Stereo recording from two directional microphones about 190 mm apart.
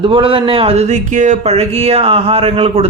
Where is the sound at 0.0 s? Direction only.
25° right (ahead or behind).